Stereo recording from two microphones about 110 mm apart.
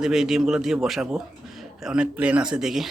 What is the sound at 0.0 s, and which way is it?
Speech, 5° right (ahead or behind).